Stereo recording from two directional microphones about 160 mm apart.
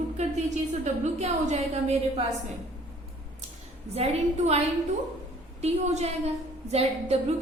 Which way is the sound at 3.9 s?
40° right (ahead or behind).